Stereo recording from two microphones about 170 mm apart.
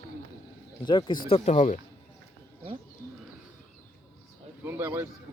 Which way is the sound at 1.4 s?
40° left (ahead or behind).